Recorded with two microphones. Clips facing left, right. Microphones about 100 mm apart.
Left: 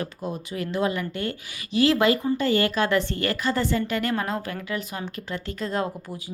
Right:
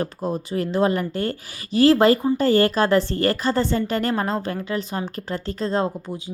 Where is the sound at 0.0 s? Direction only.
35° right (ahead or behind).